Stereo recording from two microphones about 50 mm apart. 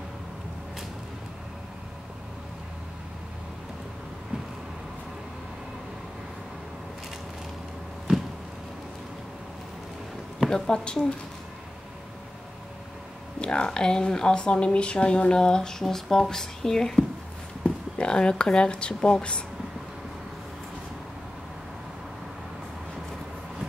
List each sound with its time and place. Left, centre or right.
10.5 s speech: centre
13.4 s speech: centre
18.9 s speech: centre